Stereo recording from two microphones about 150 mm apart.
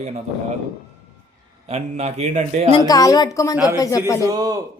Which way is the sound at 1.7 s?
45° right (ahead or behind).